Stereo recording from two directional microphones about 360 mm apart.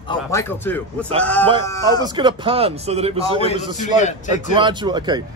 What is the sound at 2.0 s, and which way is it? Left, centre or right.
A man's voice, centre.